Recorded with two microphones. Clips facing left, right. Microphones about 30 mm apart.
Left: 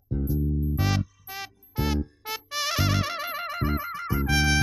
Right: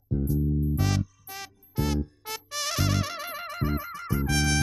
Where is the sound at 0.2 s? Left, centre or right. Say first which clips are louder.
Even; centre.